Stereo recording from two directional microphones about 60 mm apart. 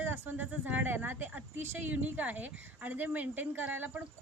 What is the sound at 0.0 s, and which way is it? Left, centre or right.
Speech, right.